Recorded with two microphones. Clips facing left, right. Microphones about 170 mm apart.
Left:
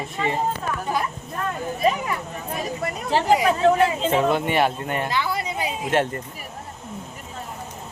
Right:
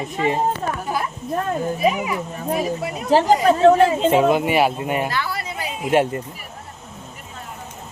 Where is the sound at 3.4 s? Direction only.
35° right (ahead or behind).